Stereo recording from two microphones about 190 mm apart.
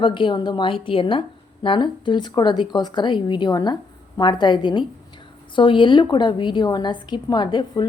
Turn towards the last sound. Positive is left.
turn(degrees=25)  # may be behind; listen again after turning